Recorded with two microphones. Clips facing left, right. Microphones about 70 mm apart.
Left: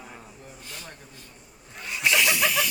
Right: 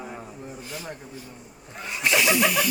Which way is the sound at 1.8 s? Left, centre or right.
Centre.